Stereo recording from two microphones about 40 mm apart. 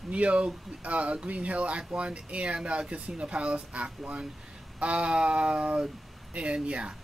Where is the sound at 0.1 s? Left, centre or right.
Right.